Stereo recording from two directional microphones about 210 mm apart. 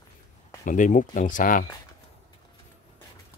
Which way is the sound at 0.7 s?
35° left (ahead or behind).